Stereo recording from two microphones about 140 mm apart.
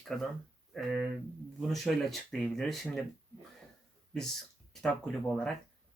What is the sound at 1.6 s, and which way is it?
Speech, centre (ahead or behind).